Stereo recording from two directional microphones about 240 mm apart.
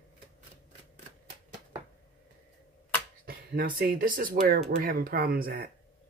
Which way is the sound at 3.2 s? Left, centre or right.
Right.